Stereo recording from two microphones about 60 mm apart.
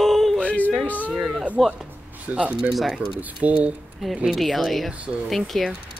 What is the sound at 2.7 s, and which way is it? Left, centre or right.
Speech, centre.